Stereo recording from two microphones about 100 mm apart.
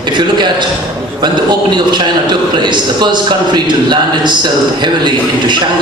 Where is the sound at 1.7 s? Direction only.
50° right (ahead or behind).